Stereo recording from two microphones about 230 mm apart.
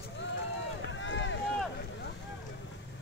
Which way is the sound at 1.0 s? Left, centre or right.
Left.